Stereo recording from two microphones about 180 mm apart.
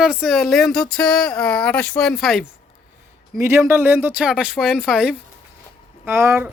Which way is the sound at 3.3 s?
15° right (ahead or behind).